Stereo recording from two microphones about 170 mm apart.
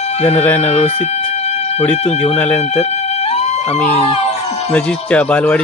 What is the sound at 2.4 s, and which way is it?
Speech, 10° left (ahead or behind).